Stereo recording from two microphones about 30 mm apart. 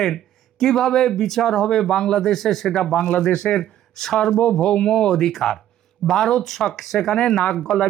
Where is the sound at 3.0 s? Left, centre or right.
Left.